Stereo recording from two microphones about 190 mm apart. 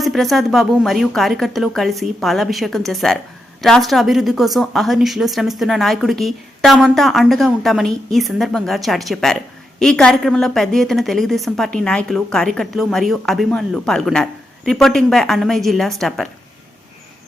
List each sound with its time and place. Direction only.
0.0 s a woman's voice: centre (ahead or behind)